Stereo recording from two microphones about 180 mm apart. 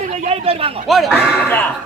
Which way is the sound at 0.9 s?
Centre (ahead or behind).